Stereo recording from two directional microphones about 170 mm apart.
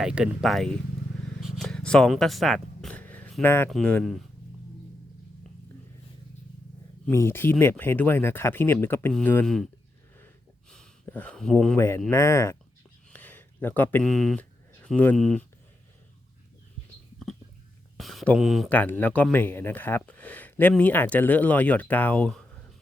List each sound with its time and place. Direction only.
0.0 s speech: 5° right (ahead or behind)
1.4 s purr: centre (ahead or behind)
3.7 s speech: 5° left (ahead or behind)
7.1 s speech: 15° left (ahead or behind)
11.0 s speech: 10° left (ahead or behind)
11.8 s speech: 15° left (ahead or behind)
13.1 s a sound: 10° left (ahead or behind)
14.7 s speech: 10° left (ahead or behind)
17.9 s a sound: centre (ahead or behind)
18.7 s speech: 10° left (ahead or behind)